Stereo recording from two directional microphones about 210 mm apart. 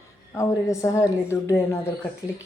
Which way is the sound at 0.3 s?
15° left (ahead or behind).